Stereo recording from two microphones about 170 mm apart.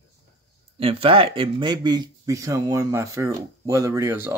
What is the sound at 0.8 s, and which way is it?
Speech, 35° right (ahead or behind).